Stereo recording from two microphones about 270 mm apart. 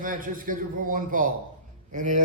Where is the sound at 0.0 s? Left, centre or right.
Right.